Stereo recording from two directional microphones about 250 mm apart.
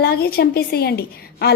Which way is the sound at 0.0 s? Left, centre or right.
Left.